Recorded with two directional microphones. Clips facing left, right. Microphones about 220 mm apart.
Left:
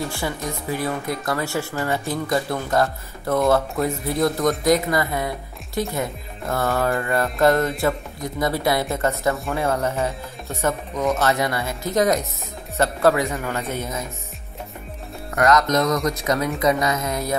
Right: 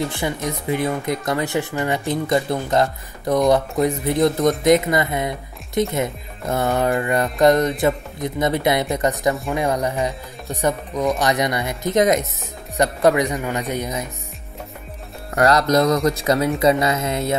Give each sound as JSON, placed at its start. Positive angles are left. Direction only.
{"t": 0.5, "sound": "speech", "side_deg": -20}
{"t": 15.3, "sound": "speech", "side_deg": -30}